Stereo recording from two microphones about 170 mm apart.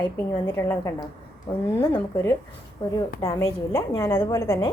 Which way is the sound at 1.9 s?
15° left (ahead or behind).